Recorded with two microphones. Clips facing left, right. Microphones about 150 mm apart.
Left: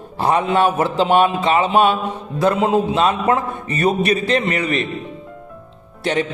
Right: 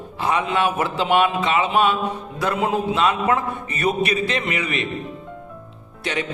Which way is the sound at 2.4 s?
25° left (ahead or behind).